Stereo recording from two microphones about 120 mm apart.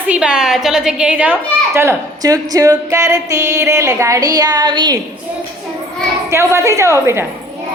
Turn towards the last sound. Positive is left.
turn(degrees=-25)  # may be behind; listen again after turning